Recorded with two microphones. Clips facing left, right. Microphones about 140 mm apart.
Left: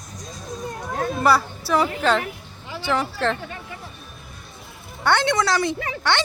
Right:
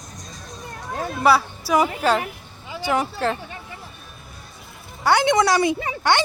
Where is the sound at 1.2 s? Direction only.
5° right (ahead or behind).